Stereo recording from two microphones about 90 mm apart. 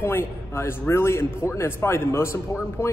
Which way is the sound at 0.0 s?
30° left (ahead or behind).